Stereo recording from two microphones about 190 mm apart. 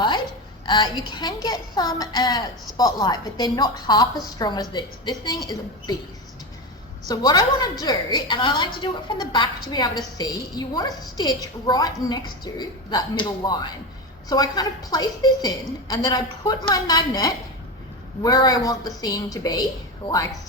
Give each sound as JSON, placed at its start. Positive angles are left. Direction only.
{"t": 0.6, "sound": "a woman's voice", "side_deg": 25}
{"t": 7.1, "sound": "a woman's voice", "side_deg": 20}